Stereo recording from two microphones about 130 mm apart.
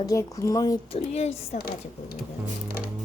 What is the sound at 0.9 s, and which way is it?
Speech, 55° left (ahead or behind).